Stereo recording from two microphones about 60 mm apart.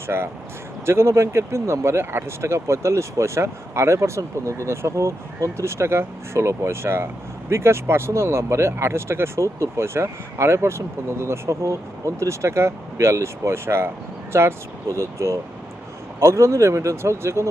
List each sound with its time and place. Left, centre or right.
0.1 s speech: right